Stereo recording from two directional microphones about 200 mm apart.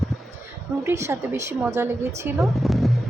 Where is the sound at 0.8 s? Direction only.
15° right (ahead or behind).